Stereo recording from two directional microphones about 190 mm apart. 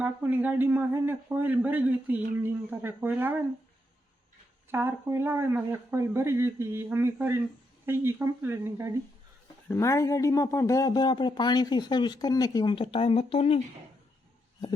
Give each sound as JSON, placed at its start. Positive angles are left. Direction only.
{"t": 0.0, "sound": "speech", "side_deg": -10}
{"t": 4.7, "sound": "speech", "side_deg": -10}
{"t": 9.6, "sound": "speech", "side_deg": 15}